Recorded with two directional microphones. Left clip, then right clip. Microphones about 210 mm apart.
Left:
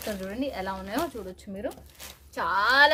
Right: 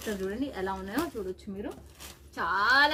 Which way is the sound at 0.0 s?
40° left (ahead or behind).